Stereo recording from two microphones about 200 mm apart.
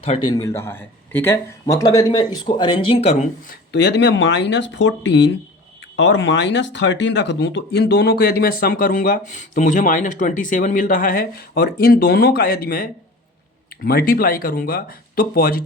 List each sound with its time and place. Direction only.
0.0 s speech: 25° left (ahead or behind)
3.7 s speech: 60° left (ahead or behind)